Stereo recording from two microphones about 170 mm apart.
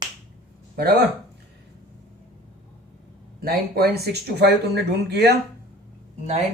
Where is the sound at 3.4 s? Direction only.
65° right (ahead or behind).